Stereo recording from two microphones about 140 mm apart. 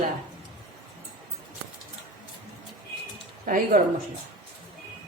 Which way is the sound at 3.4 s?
70° right (ahead or behind).